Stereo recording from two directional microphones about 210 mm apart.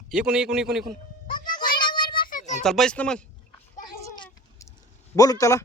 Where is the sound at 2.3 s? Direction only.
35° left (ahead or behind).